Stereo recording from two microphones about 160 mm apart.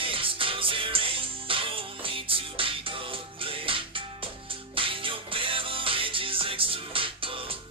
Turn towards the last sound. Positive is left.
turn(degrees=-35)  # may be behind; listen again after turning